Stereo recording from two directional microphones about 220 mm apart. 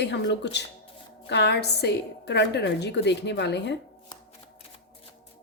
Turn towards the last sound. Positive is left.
turn(degrees=50)  # may be behind; listen again after turning